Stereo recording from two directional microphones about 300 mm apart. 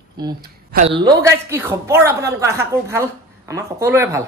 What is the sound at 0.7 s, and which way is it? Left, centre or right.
Speech, centre.